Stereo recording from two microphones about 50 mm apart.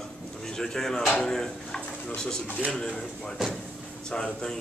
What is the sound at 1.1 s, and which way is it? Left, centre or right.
Speech, centre.